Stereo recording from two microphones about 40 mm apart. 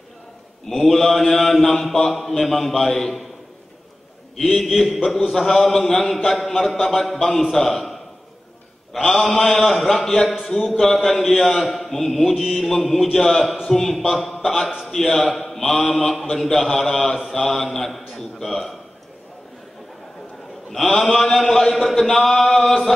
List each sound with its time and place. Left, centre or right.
0.7 s mantra: centre
4.4 s a man's voice: left
4.6 s mantra: centre
7.2 s a man's voice: centre
10.4 s mantra: centre
13.7 s a man's voice: centre
15.4 s mantra: centre
20.7 s a man's voice: centre
21.8 s mantra: centre